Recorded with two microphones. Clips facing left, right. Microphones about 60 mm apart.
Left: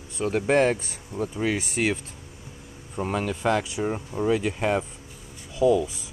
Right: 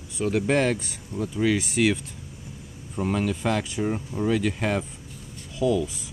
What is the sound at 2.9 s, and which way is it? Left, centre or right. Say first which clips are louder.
Speech: right 1 dB; centre.